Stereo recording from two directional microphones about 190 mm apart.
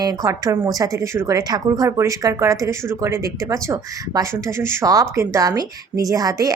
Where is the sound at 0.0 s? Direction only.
20° right (ahead or behind).